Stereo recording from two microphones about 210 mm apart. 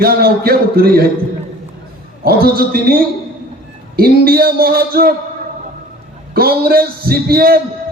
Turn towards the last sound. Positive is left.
turn(degrees=-45)  # may be behind; listen again after turning